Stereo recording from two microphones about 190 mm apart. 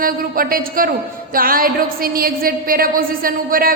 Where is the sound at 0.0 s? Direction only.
50° right (ahead or behind).